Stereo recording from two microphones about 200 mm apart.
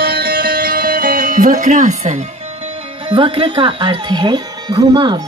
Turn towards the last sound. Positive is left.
turn(degrees=-25)  # may be behind; listen again after turning